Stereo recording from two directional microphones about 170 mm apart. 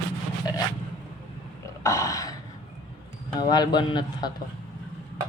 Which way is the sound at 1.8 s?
20° left (ahead or behind).